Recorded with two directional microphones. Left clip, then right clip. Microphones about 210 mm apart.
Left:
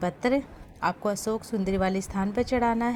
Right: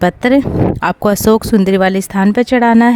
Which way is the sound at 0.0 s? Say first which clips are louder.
Right 15 dB; 45° right (ahead or behind).